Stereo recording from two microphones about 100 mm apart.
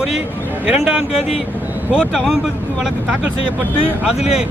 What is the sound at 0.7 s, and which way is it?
Speech, 5° right (ahead or behind).